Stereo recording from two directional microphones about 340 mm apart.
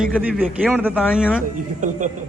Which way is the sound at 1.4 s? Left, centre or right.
Right.